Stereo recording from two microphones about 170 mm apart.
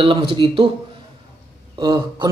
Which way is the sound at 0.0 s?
30° right (ahead or behind).